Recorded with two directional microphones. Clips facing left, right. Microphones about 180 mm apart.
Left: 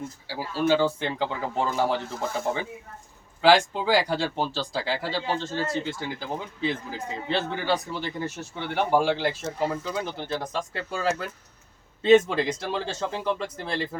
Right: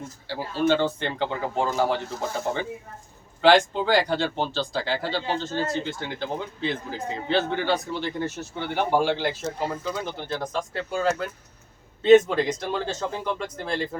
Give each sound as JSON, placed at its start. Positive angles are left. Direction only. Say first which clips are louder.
{"t": 0.3, "sound": "speech", "louder": "right 1 dB", "side_deg": 5}
{"t": 12.0, "sound": "speech", "louder": "right 3 dB", "side_deg": 5}